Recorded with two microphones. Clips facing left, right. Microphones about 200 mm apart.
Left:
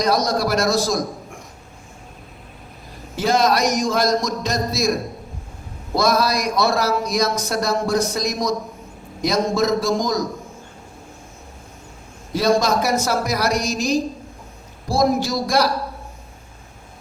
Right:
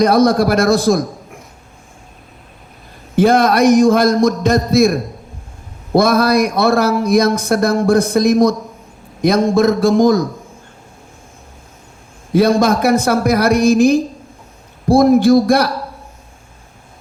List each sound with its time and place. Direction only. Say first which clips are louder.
0.0 s speech: right 8 dB; 55° right (ahead or behind)
3.2 s speech: right 7 dB; 55° right (ahead or behind)
12.3 s speech: right 6 dB; 55° right (ahead or behind)